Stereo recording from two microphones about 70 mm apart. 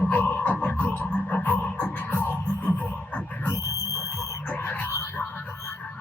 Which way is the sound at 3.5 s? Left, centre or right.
Left.